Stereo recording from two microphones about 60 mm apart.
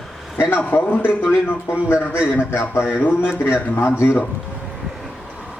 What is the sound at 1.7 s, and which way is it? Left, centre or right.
Speech, centre.